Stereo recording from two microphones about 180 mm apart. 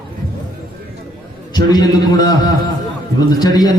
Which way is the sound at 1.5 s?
20° left (ahead or behind).